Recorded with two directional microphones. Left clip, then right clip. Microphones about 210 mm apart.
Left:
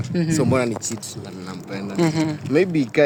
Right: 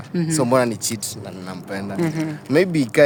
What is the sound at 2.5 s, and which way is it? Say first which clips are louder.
Speech: right 1 dB; 40° right (ahead or behind).